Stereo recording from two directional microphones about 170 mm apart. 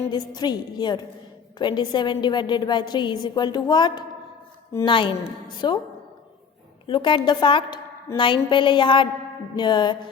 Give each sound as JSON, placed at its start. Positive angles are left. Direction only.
{"t": 0.1, "sound": "a woman's voice", "side_deg": 25}
{"t": 6.8, "sound": "a woman's voice", "side_deg": 30}